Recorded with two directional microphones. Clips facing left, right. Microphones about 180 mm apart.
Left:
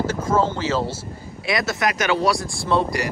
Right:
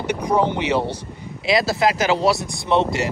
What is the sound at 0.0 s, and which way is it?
Speech, 15° right (ahead or behind).